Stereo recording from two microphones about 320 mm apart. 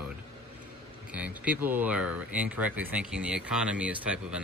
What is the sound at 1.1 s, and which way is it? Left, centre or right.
Speech, centre.